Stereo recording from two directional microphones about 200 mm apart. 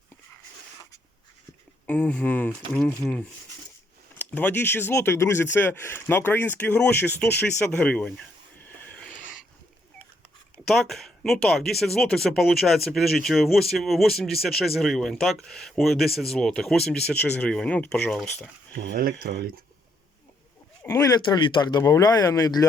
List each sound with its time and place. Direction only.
1.9 s speech: 5° left (ahead or behind)
8.9 s wheeze: 5° left (ahead or behind)
10.7 s speech: centre (ahead or behind)
18.9 s speech: 50° right (ahead or behind)
20.8 s speech: 15° left (ahead or behind)